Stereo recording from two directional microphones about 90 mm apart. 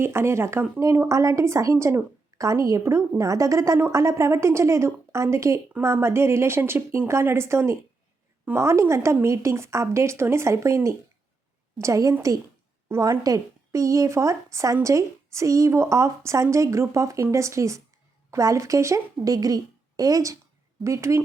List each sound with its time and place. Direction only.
0.0 s speech: 30° right (ahead or behind)